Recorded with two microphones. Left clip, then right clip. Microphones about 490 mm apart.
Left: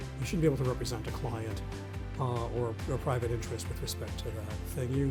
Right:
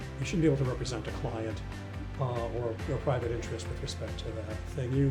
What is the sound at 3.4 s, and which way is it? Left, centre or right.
Speech, left.